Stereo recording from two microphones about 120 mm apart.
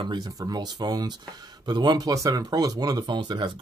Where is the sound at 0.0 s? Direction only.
35° right (ahead or behind).